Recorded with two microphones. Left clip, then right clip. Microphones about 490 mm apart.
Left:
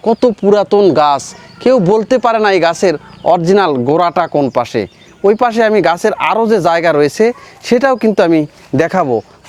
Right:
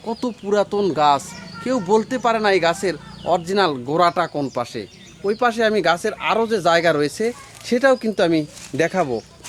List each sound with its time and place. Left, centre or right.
0.0 s speech: left